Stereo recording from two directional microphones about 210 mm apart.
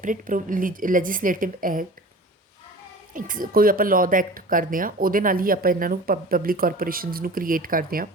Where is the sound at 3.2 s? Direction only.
40° right (ahead or behind).